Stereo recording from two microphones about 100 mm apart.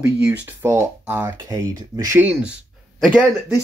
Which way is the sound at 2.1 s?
15° right (ahead or behind).